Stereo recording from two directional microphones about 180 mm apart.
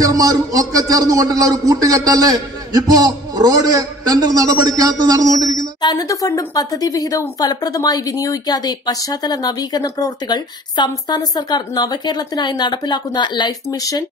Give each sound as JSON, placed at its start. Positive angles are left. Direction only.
{"t": 0.0, "sound": "a man's voice", "side_deg": -20}
{"t": 5.8, "sound": "a woman's voice", "side_deg": 20}